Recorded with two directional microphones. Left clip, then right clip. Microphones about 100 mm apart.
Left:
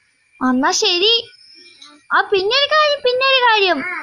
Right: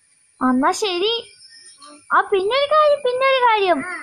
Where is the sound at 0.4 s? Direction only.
5° right (ahead or behind).